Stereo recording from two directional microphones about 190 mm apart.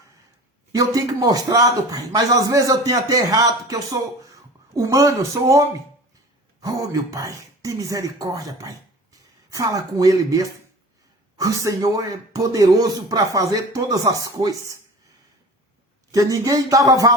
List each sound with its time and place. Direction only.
0.7 s speech: 20° right (ahead or behind)
16.1 s speech: 15° right (ahead or behind)